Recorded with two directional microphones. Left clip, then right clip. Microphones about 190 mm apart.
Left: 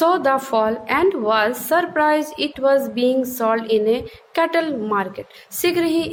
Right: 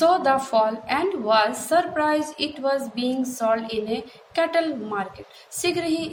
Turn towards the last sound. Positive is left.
turn(degrees=55)  # may be behind; listen again after turning